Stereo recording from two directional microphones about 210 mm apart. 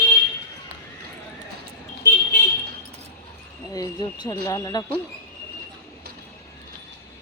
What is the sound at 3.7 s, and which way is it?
Speech, 15° left (ahead or behind).